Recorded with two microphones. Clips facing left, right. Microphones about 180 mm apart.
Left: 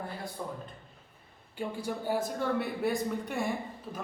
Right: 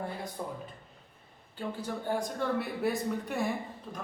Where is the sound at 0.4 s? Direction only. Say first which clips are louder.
Even; 15° right (ahead or behind).